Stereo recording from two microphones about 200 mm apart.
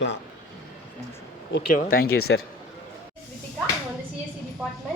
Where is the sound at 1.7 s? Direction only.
45° left (ahead or behind).